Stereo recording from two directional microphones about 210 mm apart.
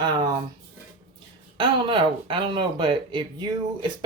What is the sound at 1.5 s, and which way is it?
Speech, 25° right (ahead or behind).